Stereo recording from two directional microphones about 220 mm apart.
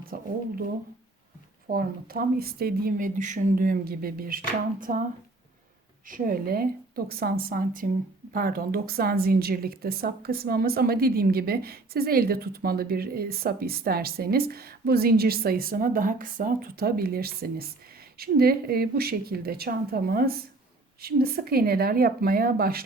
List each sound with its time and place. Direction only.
0.0 s speech: 40° right (ahead or behind)
1.6 s speech: 40° right (ahead or behind)
6.1 s a woman's voice: 40° right (ahead or behind)